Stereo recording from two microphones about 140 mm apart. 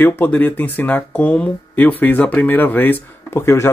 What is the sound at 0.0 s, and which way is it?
Speech, 10° left (ahead or behind).